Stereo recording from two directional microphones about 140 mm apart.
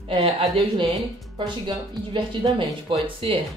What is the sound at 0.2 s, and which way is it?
A woman's voice, 40° right (ahead or behind).